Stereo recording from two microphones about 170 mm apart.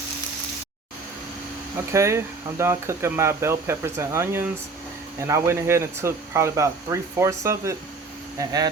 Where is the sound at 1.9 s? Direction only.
15° right (ahead or behind).